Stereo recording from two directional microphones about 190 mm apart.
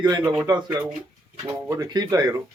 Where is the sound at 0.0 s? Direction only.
20° right (ahead or behind).